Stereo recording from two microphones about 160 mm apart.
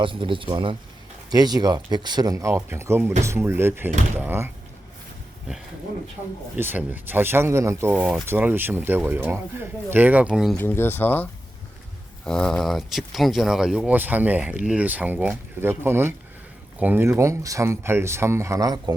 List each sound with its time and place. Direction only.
0.0 s speech: 30° right (ahead or behind); by 4.5 s 15° right (ahead or behind)
6.6 s speech: 10° right (ahead or behind)
10.6 s speech: 15° left (ahead or behind); by 18.9 s 25° right (ahead or behind)